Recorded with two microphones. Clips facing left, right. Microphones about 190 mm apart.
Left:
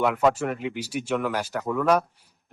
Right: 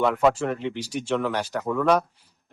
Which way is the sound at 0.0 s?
5° left (ahead or behind).